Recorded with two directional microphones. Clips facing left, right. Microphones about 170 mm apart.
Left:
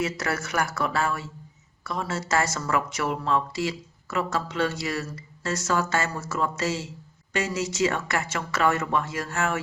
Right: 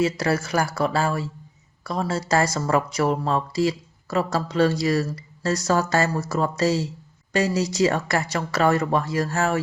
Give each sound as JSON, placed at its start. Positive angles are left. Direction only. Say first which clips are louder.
{"t": 0.0, "sound": "speech", "louder": "right 6 dB", "side_deg": -30}